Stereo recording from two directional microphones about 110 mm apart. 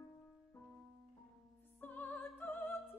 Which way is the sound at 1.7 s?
15° left (ahead or behind).